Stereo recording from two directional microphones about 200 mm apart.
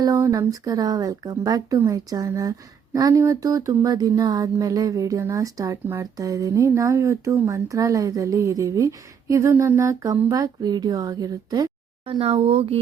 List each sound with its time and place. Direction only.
0.0 s speech: 15° right (ahead or behind)